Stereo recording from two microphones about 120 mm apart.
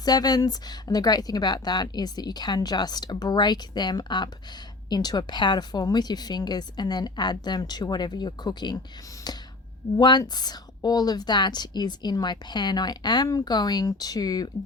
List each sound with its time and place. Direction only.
0.0 s a woman's voice: 35° left (ahead or behind)